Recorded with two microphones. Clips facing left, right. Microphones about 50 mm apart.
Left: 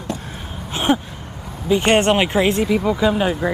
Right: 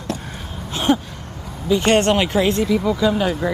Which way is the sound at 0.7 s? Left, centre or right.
Left.